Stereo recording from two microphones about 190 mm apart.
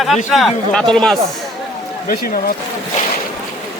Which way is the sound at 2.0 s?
50° left (ahead or behind).